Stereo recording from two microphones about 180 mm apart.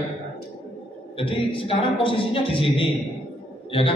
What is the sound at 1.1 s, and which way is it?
A man's voice, 30° left (ahead or behind).